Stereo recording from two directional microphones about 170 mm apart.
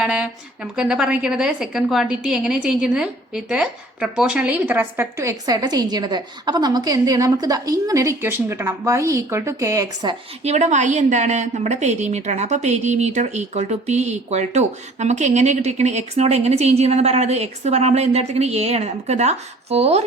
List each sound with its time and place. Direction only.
0.0 s a woman's voice: 5° right (ahead or behind); by 10.2 s 20° right (ahead or behind)
10.4 s a woman's voice: 40° right (ahead or behind)